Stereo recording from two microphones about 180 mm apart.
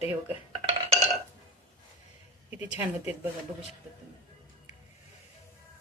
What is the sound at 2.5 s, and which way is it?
Speech, 10° right (ahead or behind).